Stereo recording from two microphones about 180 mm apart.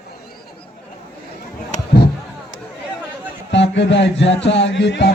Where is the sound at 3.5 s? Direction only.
80° left.